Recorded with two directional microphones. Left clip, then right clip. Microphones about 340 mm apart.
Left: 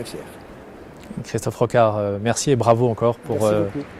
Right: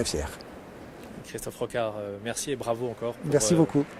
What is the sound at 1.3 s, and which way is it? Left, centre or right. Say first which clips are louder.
Speech: left 12 dB; left.